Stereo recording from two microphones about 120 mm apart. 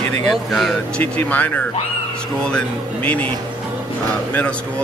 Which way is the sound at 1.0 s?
15° left (ahead or behind).